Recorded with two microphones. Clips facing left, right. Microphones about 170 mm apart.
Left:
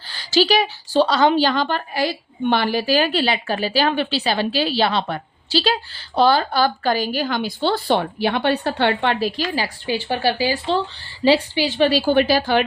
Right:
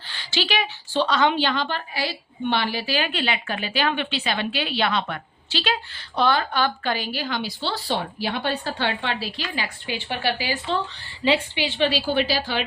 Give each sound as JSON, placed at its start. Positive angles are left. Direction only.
{"t": 0.1, "sound": "a woman's voice", "side_deg": 40}
{"t": 9.4, "sound": "a woman's voice", "side_deg": 35}